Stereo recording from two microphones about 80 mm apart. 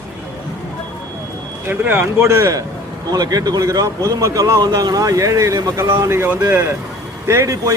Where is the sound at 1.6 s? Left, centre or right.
Right.